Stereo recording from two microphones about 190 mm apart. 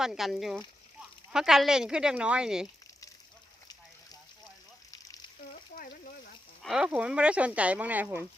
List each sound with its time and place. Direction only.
0.0 s speech: centre (ahead or behind)
4.9 s frying: 20° left (ahead or behind)
6.6 s speech: 5° right (ahead or behind)